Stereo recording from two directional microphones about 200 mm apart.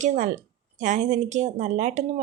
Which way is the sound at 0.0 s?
35° right (ahead or behind).